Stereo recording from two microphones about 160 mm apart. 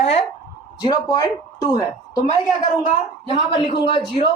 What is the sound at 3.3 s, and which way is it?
Speech, 35° left (ahead or behind).